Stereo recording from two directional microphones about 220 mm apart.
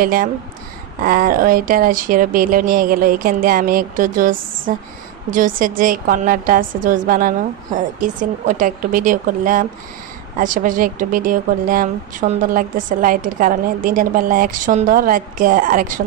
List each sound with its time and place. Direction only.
0.0 s a woman's voice: 40° right (ahead or behind)